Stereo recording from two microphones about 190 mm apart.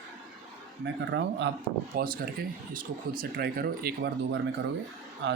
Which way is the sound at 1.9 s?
50° right (ahead or behind).